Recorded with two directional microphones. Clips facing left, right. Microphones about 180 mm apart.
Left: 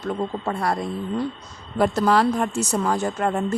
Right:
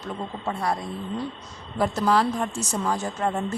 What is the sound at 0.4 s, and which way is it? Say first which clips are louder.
Speech: even; 70° left (ahead or behind).